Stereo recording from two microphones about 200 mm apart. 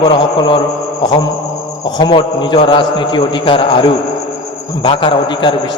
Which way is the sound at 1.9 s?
20° left (ahead or behind).